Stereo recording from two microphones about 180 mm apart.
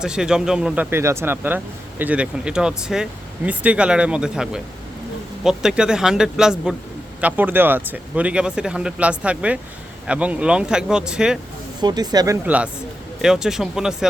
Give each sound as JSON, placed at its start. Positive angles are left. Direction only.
{"t": 0.0, "sound": "speech", "side_deg": -5}
{"t": 11.8, "sound": "speech", "side_deg": -25}